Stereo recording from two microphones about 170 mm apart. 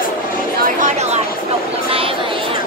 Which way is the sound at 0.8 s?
40° right (ahead or behind).